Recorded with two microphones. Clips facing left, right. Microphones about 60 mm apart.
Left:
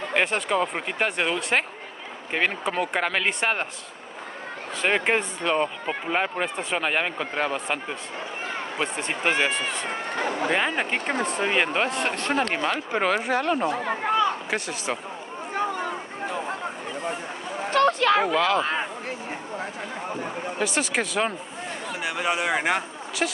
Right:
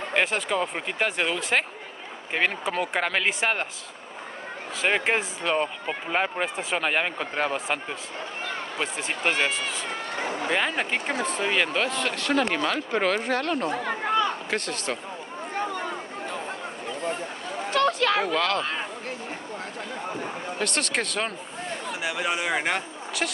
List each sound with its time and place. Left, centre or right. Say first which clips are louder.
0.1 s speech: left 1 dB; centre
4.8 s speech: left 1 dB; centre
9.2 s speech: left 1 dB; centre
10.5 s speech: right 1 dB; centre
11.1 s speech: left 2 dB; left
11.4 s speech: left 1 dB; centre
11.9 s speech: even; left
12.9 s speech: left 2 dB; centre
17.6 s a sound: left 3 dB; left
18.2 s speech: left 3 dB; centre
20.5 s speech: left 2 dB; centre